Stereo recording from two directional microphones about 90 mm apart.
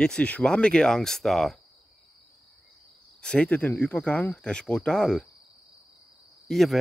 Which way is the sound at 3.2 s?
10° left (ahead or behind).